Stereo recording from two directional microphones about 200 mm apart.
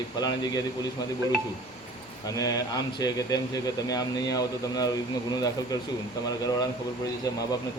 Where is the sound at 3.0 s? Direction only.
20° left (ahead or behind).